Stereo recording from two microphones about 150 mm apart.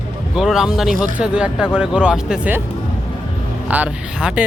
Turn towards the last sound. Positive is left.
turn(degrees=-10)  # may be behind; listen again after turning